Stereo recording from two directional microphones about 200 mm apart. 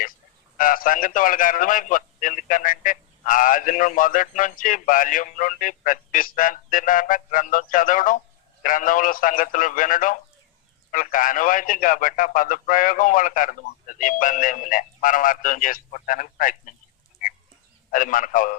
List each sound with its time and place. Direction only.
0.5 s a man's voice: 45° left (ahead or behind)
17.9 s a man's voice: 40° left (ahead or behind)